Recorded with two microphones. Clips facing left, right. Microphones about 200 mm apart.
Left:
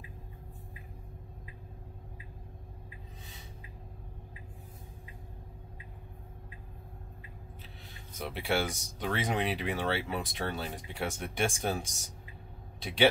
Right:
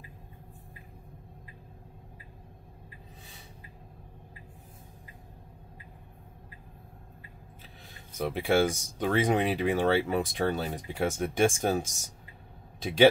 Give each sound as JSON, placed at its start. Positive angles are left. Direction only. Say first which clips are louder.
{"t": 8.2, "sound": "speech", "louder": "right 7 dB", "side_deg": -45}